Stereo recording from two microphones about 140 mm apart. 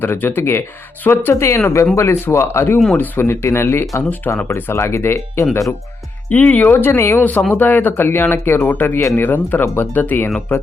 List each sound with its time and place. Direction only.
0.0 s speech: 15° left (ahead or behind)